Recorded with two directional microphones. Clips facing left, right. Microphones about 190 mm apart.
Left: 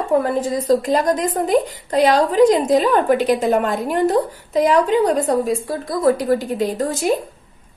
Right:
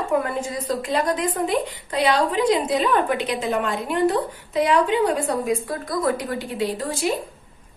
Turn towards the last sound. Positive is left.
turn(degrees=45)  # may be behind; listen again after turning